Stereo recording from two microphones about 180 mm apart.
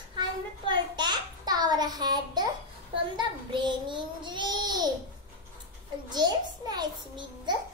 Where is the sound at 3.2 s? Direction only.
25° right (ahead or behind).